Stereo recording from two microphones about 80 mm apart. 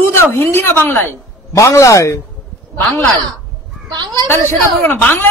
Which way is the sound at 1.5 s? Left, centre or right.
Left.